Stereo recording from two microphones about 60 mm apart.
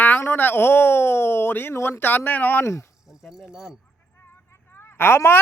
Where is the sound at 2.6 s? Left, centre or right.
Left.